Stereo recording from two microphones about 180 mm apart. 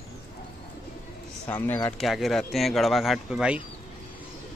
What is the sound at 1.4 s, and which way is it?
Speech, 10° left (ahead or behind).